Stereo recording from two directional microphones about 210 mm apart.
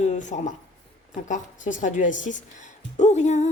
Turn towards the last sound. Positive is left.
turn(degrees=35)  # may be behind; listen again after turning